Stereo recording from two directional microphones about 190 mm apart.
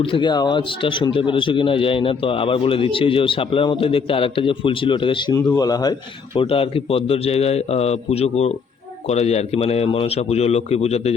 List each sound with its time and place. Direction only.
0.0 s speech: 25° left (ahead or behind)